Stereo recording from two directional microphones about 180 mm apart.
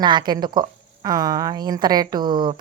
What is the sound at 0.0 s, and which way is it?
A woman's voice, 25° right (ahead or behind).